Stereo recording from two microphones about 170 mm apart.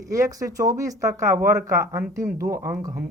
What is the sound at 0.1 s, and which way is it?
Speech, 20° right (ahead or behind).